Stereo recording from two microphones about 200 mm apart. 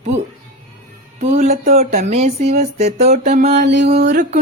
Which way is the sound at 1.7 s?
35° right (ahead or behind).